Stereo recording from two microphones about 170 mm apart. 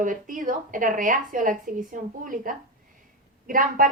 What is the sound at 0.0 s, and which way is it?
A woman's voice, 50° right (ahead or behind).